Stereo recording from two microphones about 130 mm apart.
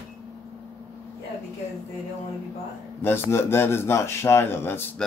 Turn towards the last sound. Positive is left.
turn(degrees=20)  # may be behind; listen again after turning